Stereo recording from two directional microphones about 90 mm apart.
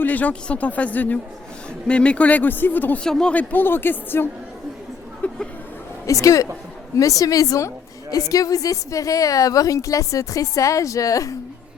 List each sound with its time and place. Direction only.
0.0 s speech: 20° left (ahead or behind)
3.0 s a woman's voice: 10° left (ahead or behind); by 4.3 s 25° left (ahead or behind)
5.2 s a sound: 15° left (ahead or behind)
6.1 s a woman's voice: 35° left (ahead or behind)